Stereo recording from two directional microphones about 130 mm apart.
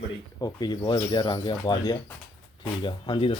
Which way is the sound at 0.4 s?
35° left (ahead or behind).